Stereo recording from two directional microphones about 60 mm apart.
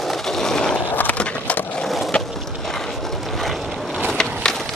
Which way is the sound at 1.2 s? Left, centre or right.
Centre.